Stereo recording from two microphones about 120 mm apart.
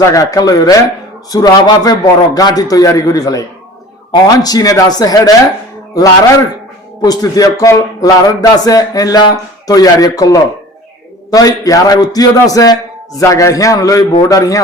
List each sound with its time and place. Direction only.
0.0 s speech: 30° left (ahead or behind)
7.0 s a man's voice: 30° left (ahead or behind)